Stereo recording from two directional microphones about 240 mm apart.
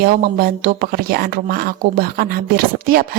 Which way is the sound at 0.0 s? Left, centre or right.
Right.